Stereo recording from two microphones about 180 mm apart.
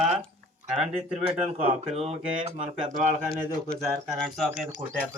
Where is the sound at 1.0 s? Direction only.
35° right (ahead or behind).